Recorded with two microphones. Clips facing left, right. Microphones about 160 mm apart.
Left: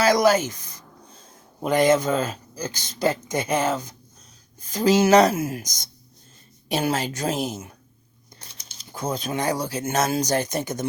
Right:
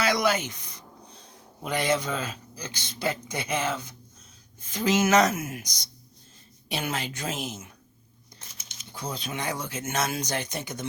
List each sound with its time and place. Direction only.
0.0 s a woman's voice: 40° left (ahead or behind)
5.6 s a woman's voice: 45° left (ahead or behind)